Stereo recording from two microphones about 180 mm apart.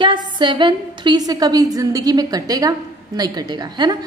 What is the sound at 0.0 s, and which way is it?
A woman's voice, 25° right (ahead or behind).